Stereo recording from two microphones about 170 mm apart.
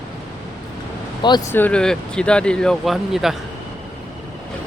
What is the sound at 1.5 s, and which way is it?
Speech, 10° left (ahead or behind).